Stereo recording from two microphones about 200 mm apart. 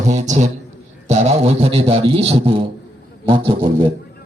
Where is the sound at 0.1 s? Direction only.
35° right (ahead or behind).